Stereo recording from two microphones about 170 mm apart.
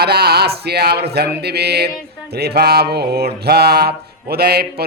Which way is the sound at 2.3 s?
70° right (ahead or behind).